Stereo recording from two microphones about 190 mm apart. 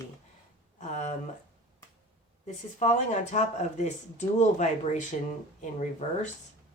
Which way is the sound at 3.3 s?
40° left (ahead or behind).